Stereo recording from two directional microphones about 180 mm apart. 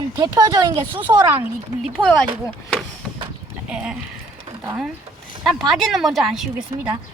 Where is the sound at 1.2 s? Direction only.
15° right (ahead or behind).